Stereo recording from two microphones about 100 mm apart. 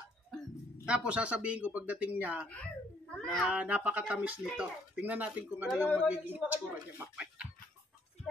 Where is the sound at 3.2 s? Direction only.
5° left (ahead or behind).